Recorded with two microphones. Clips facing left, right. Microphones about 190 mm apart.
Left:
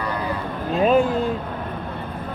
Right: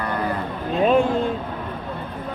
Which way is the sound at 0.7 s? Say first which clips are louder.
Even; centre (ahead or behind).